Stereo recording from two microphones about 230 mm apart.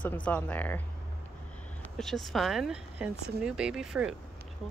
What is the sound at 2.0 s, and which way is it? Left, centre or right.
Speech, centre.